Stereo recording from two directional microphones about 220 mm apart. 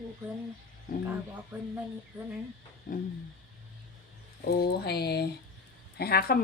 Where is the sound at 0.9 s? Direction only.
40° left (ahead or behind).